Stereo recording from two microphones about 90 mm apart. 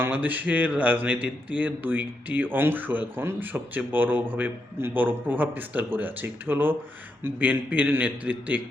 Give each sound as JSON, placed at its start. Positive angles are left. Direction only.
{"t": 0.0, "sound": "a man's voice", "side_deg": -20}